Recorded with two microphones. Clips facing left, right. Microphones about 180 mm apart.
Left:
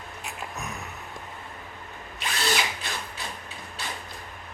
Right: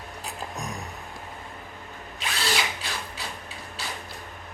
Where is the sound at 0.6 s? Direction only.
35° right (ahead or behind).